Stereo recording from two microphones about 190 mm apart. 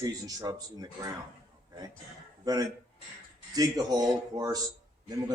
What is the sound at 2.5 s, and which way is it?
A man's voice, 20° right (ahead or behind).